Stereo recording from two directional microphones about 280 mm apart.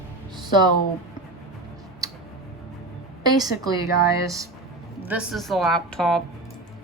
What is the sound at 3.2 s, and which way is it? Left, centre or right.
Speech, centre.